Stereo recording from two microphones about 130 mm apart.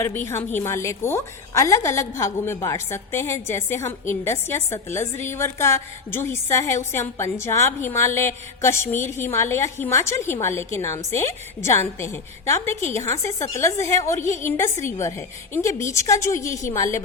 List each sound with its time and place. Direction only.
0.0 s a woman's voice: 20° left (ahead or behind)